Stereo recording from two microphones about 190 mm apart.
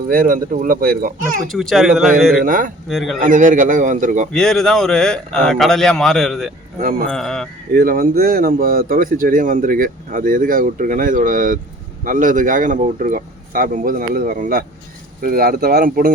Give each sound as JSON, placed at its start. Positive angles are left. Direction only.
{"t": 0.1, "sound": "speech", "side_deg": -45}
{"t": 1.5, "sound": "speech", "side_deg": 0}
{"t": 2.4, "sound": "speech", "side_deg": -45}
{"t": 2.9, "sound": "speech", "side_deg": 0}
{"t": 3.2, "sound": "speech", "side_deg": -45}
{"t": 4.3, "sound": "speech", "side_deg": 0}
{"t": 6.7, "sound": "speech", "side_deg": -50}
{"t": 7.1, "sound": "speech", "side_deg": 0}
{"t": 7.7, "sound": "speech", "side_deg": -50}